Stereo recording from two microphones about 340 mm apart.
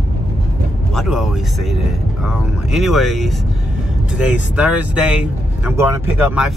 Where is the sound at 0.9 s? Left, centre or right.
Centre.